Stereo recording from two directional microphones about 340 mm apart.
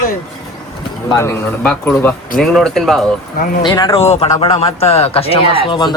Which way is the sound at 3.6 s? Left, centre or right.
Centre.